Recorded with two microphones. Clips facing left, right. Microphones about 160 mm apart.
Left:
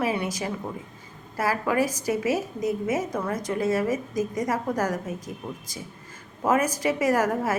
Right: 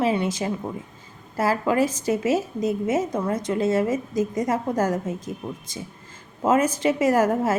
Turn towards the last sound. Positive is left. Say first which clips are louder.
# right 3 dB
turn(degrees=-25)  # may be behind; listen again after turning